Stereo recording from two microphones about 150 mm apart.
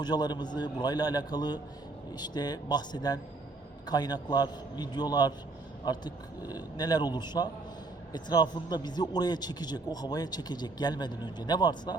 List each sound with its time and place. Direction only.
0.0 s a man's voice: 30° left (ahead or behind)